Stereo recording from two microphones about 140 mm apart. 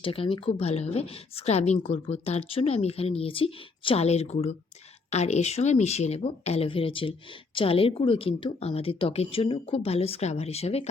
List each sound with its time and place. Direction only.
0.0 s a woman's voice: 40° left (ahead or behind)